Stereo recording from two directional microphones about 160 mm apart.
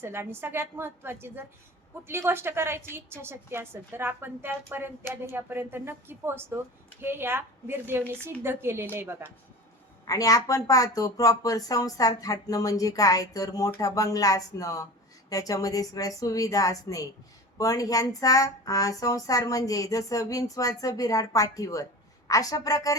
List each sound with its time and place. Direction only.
0.0 s a woman's voice: 15° right (ahead or behind)
10.1 s speech: 20° left (ahead or behind)